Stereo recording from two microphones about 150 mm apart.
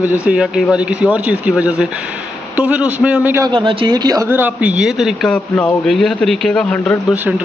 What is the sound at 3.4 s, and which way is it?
Speech, 30° right (ahead or behind).